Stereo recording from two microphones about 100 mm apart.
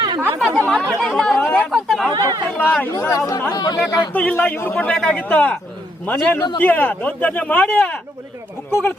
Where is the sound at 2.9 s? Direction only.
30° left (ahead or behind).